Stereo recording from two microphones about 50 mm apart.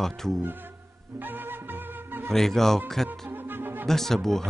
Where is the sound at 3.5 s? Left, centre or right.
Right.